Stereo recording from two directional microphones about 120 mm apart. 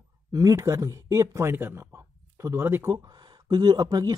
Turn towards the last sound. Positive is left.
turn(degrees=-35)  # may be behind; listen again after turning